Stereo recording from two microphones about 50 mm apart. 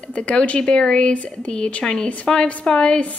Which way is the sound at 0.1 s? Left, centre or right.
Left.